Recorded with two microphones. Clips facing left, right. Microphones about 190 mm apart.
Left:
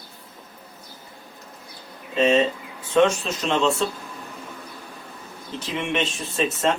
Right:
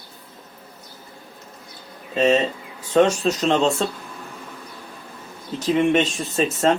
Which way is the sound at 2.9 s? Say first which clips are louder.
Right 2 dB; 40° right (ahead or behind).